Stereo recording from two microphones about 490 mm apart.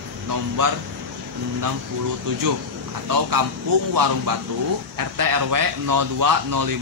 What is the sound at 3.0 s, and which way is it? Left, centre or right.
Speech, right.